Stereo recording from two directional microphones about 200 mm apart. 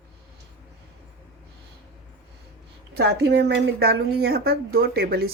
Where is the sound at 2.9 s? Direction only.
55° right (ahead or behind).